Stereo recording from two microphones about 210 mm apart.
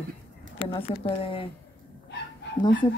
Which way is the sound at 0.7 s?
25° left (ahead or behind).